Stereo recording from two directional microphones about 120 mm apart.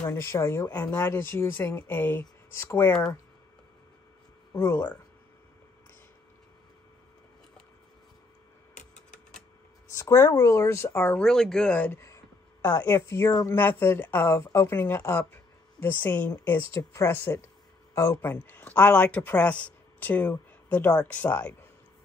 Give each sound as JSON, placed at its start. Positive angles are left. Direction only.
{"t": 0.1, "sound": "speech", "side_deg": 25}
{"t": 4.6, "sound": "speech", "side_deg": 20}
{"t": 8.9, "sound": "typewriter", "side_deg": 10}
{"t": 9.8, "sound": "speech", "side_deg": 25}
{"t": 11.2, "sound": "speech", "side_deg": 5}
{"t": 13.3, "sound": "speech", "side_deg": 30}
{"t": 13.6, "sound": "speech", "side_deg": 15}
{"t": 18.3, "sound": "speech", "side_deg": 15}